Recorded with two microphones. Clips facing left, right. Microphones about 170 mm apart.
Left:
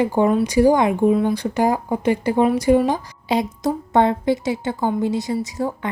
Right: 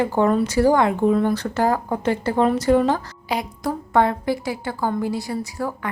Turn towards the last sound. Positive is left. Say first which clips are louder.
# left 3 dB
turn(degrees=20)  # may be behind; listen again after turning